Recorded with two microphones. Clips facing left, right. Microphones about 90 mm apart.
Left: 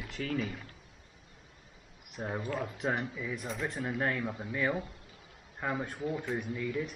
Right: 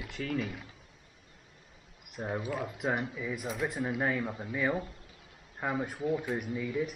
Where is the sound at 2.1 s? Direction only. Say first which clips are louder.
Right 1 dB; centre (ahead or behind).